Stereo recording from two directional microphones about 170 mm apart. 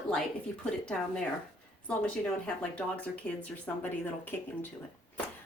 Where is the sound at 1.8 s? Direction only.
5° left (ahead or behind).